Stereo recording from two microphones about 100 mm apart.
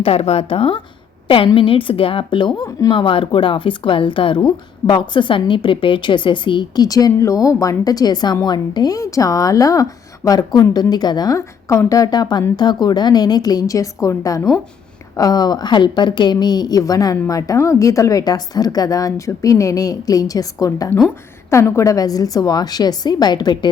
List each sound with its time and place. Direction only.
0.0 s a woman's voice: 90° left; by 0.8 s 75° left (ahead or behind)
1.5 s a woman's voice: 60° left (ahead or behind)
6.8 s a woman's voice: 40° left (ahead or behind)